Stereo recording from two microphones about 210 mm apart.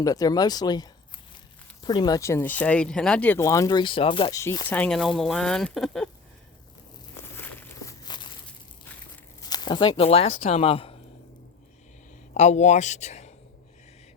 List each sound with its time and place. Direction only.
0.0 s speech: 15° left (ahead or behind)
7.3 s walk: 10° left (ahead or behind)
9.4 s speech: 20° left (ahead or behind)
12.3 s speech: 35° left (ahead or behind)